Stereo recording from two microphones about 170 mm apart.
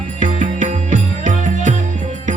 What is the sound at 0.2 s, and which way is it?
Music, 45° right (ahead or behind).